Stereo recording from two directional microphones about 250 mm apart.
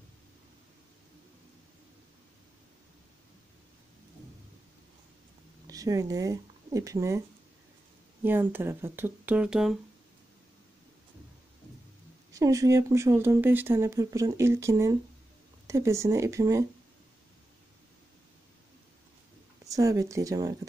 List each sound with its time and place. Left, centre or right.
5.7 s speech: centre
12.3 s speech: centre
19.6 s speech: centre